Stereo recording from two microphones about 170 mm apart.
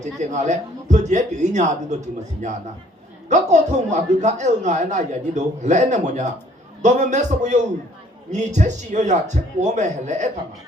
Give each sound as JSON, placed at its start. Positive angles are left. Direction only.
{"t": 0.0, "sound": "a man's voice", "side_deg": -45}